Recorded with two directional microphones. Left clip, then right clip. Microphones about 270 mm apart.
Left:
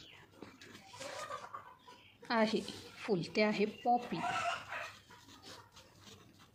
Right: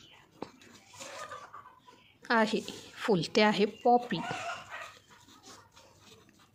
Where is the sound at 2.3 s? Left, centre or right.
Right.